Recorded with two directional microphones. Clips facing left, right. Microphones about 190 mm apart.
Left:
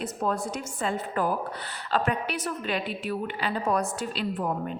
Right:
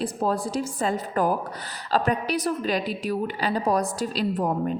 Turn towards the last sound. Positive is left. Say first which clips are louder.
# right 5 dB
turn(degrees=-40)  # may be behind; listen again after turning